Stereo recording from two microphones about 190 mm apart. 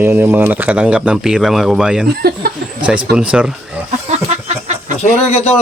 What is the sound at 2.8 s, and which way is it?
Speech, 5° right (ahead or behind).